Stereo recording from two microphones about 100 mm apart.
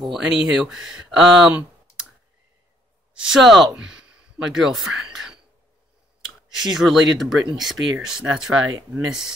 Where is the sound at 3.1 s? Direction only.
5° right (ahead or behind).